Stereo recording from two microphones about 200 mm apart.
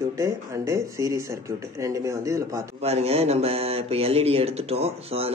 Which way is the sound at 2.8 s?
30° right (ahead or behind).